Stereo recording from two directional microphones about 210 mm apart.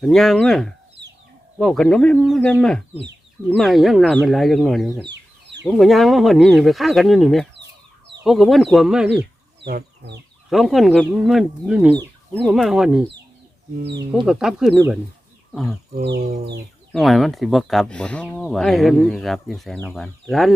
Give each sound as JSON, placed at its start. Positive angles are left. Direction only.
{"t": 0.0, "sound": "speech", "side_deg": 0}
{"t": 5.1, "sound": "chicken", "side_deg": -55}
{"t": 5.6, "sound": "speech", "side_deg": 0}
{"t": 7.5, "sound": "chicken", "side_deg": -55}
{"t": 8.2, "sound": "speech", "side_deg": 0}
{"t": 9.6, "sound": "speech", "side_deg": -50}
{"t": 10.5, "sound": "speech", "side_deg": 0}
{"t": 13.7, "sound": "speech", "side_deg": -50}
{"t": 14.3, "sound": "speech", "side_deg": 0}
{"t": 16.0, "sound": "speech", "side_deg": -50}
{"t": 16.2, "sound": "bird", "side_deg": -30}
{"t": 16.9, "sound": "speech", "side_deg": 0}